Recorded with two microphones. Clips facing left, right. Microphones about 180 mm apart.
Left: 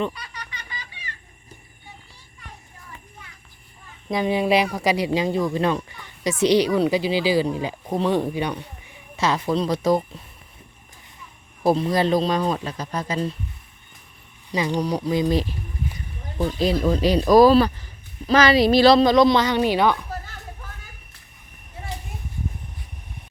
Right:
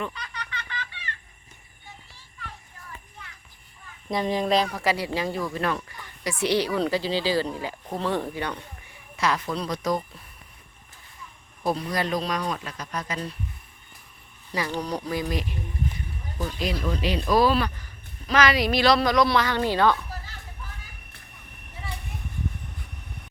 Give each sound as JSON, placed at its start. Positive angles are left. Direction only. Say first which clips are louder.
{"t": 0.1, "sound": "a sound", "louder": "right 1 dB", "side_deg": 10}
{"t": 4.1, "sound": "a woman's voice", "louder": "left 3 dB", "side_deg": 5}
{"t": 11.6, "sound": "a woman's voice", "louder": "left 7 dB", "side_deg": 25}
{"t": 14.5, "sound": "speech", "louder": "left 5 dB", "side_deg": 15}
{"t": 16.4, "sound": "a woman's voice", "louder": "left 8 dB", "side_deg": 35}